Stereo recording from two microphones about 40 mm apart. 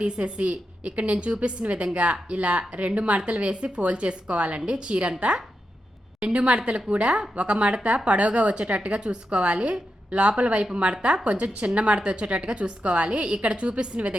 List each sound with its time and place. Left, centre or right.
0.0 s a woman's voice: right
6.2 s a woman's voice: right